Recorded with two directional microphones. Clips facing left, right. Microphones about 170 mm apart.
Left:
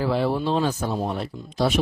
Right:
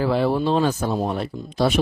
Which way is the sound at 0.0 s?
60° right (ahead or behind).